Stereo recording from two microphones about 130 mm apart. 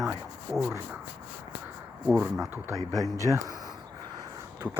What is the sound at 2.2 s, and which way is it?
Speech, 10° right (ahead or behind).